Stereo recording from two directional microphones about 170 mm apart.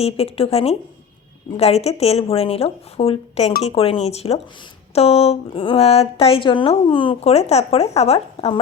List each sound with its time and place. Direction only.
0.0 s a woman's voice: 35° left (ahead or behind)